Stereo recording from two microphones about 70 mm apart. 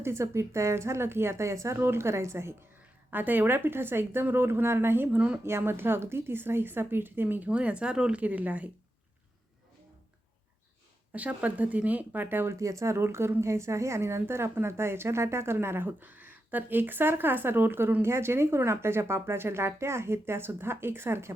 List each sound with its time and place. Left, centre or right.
0.0 s speech: right
3.1 s speech: right
11.1 s speech: right
12.5 s speech: right